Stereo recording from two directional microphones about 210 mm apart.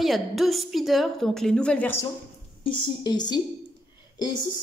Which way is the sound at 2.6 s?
20° left (ahead or behind).